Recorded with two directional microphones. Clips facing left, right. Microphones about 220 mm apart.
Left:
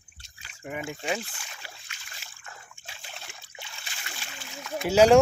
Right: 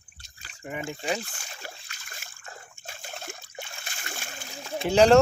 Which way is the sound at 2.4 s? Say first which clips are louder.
Right 3 dB; 45° right (ahead or behind).